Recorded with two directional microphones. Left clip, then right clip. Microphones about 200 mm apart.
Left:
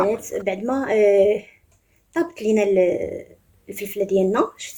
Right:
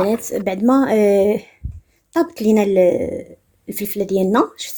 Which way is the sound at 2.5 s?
50° right (ahead or behind).